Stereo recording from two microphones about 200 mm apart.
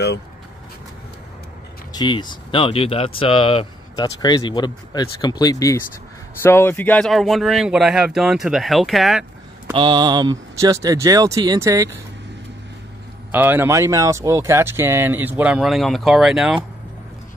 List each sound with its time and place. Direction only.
1.9 s speech: 20° left (ahead or behind); by 9.2 s centre (ahead or behind)
9.7 s speech: 25° right (ahead or behind)
13.3 s speech: 10° right (ahead or behind)